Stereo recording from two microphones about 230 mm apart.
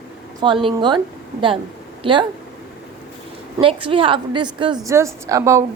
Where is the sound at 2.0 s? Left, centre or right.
Right.